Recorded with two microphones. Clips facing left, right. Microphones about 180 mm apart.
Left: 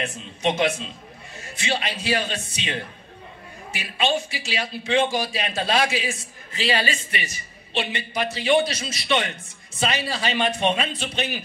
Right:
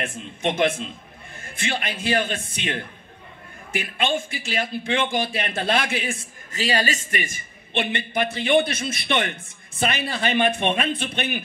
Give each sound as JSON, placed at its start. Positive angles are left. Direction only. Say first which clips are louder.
{"t": 0.0, "sound": "a man's voice", "louder": "left 1 dB", "side_deg": -55}